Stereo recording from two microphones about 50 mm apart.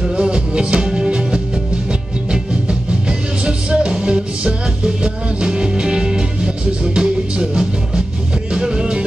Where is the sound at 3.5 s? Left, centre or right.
Right.